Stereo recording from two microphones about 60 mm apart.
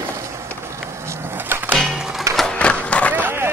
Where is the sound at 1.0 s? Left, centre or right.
Right.